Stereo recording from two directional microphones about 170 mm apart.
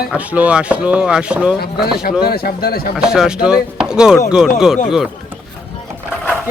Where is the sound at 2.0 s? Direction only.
65° left (ahead or behind).